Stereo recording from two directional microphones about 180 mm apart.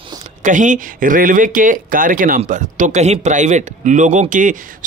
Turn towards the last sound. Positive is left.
turn(degrees=-45)  # may be behind; listen again after turning